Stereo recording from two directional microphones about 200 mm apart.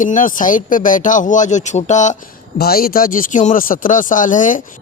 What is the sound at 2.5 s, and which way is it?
Speech, 50° left (ahead or behind).